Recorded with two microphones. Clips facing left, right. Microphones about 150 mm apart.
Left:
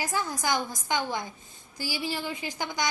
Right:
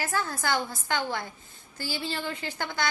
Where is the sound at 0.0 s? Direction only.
15° left (ahead or behind).